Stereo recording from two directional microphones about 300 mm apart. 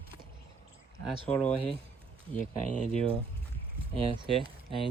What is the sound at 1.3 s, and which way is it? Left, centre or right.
Speech, centre.